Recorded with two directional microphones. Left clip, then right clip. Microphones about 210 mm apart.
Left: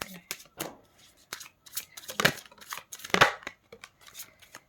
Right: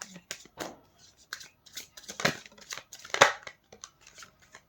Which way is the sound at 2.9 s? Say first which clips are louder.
Even; 25° left (ahead or behind).